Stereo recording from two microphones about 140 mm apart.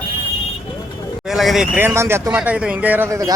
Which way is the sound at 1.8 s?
15° right (ahead or behind).